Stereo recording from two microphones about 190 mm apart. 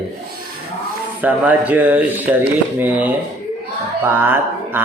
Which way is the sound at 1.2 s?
10° right (ahead or behind).